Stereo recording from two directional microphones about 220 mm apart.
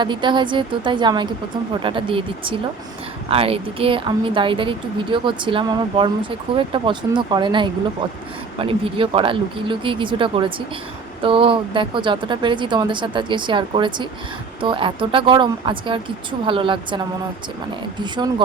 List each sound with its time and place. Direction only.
0.0 s speech: 20° right (ahead or behind)
18.0 s speech: 20° right (ahead or behind)